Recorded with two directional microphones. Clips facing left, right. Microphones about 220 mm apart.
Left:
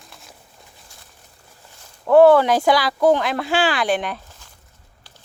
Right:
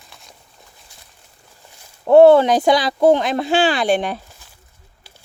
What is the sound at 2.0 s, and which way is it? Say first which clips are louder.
Speech: right 3 dB; 25° right (ahead or behind).